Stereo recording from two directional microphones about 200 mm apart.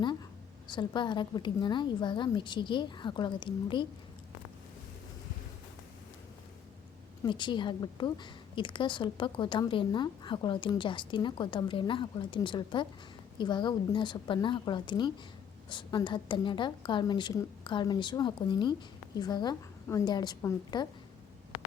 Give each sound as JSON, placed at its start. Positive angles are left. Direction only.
{"t": 0.7, "sound": "a woman's voice", "side_deg": 25}
{"t": 7.3, "sound": "a woman's voice", "side_deg": 25}